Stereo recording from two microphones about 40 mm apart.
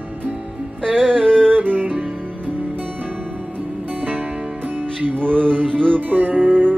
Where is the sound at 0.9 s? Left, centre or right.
Centre.